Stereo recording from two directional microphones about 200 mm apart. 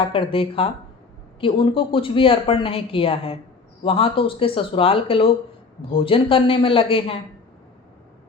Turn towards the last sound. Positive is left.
turn(degrees=25)  # may be behind; listen again after turning